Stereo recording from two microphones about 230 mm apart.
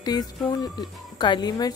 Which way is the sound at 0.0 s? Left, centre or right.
Centre.